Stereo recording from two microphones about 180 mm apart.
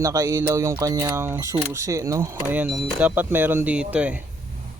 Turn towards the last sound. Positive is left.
turn(degrees=-5)  # may be behind; listen again after turning